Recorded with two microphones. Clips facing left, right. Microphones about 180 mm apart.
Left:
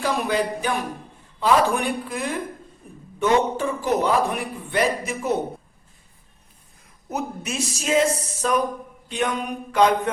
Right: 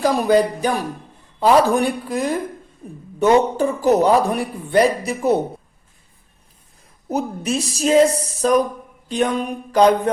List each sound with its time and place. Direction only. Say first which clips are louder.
0.0 s a man's voice: right 7 dB; 40° right (ahead or behind)
7.1 s a man's voice: right 7 dB; 35° right (ahead or behind)